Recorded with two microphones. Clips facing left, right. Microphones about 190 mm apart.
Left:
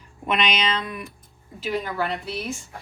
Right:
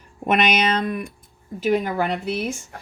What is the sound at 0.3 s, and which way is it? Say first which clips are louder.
Speech: right 5 dB; 45° right (ahead or behind).